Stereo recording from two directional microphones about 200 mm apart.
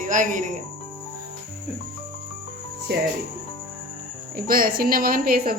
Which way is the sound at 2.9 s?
55° right (ahead or behind).